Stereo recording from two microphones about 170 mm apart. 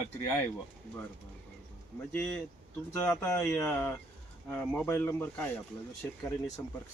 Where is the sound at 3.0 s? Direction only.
10° left (ahead or behind).